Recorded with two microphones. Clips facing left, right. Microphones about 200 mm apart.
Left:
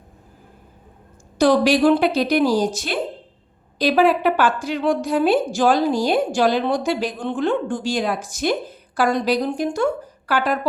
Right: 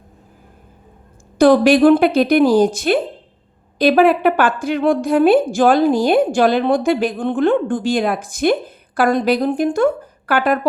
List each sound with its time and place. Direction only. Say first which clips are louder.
1.4 s a woman's voice: right 5 dB; 55° right (ahead or behind)